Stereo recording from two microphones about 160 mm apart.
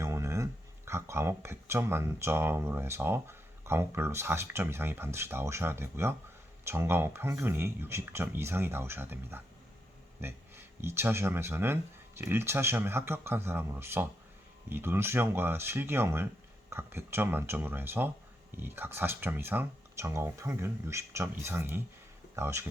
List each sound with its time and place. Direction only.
0.0 s speech: 20° right (ahead or behind)